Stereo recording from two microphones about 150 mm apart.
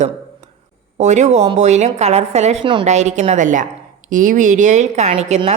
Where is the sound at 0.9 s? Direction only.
50° right (ahead or behind).